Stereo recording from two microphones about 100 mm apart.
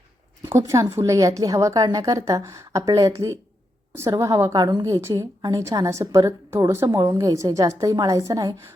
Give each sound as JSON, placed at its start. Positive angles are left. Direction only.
{"t": 0.4, "sound": "a woman's voice", "side_deg": -30}